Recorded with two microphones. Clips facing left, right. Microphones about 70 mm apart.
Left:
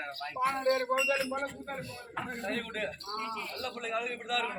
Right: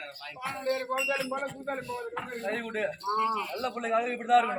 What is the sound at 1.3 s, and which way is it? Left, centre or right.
A man's voice, right.